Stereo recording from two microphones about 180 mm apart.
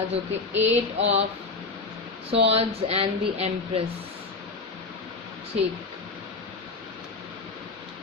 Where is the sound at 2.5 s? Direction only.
35° right (ahead or behind).